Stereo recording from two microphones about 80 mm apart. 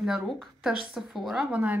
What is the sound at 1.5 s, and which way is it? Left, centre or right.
Speech, right.